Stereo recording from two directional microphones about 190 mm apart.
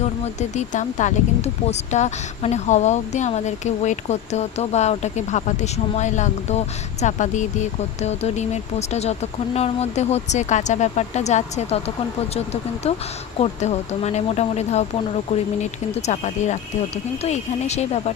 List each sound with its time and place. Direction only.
0.0 s speech: 40° left (ahead or behind)
13.4 s speech: 35° left (ahead or behind)